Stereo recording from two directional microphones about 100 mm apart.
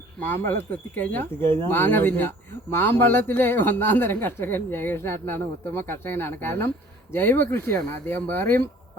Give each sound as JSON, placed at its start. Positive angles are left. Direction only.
{"t": 0.2, "sound": "speech", "side_deg": 20}